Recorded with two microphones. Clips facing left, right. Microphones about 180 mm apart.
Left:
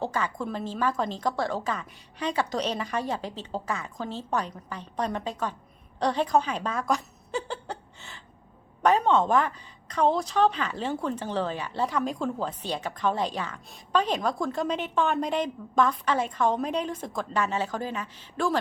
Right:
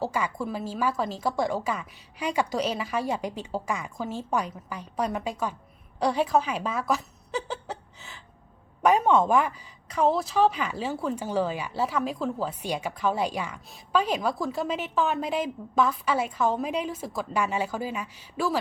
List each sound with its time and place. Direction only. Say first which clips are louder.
0.0 s a woman's voice: right 1 dB; 10° right (ahead or behind)